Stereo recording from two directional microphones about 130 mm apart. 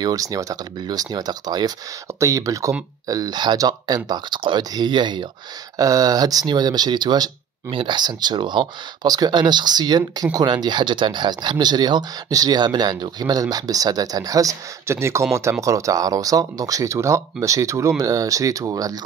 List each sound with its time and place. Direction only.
0.0 s speech: 30° right (ahead or behind)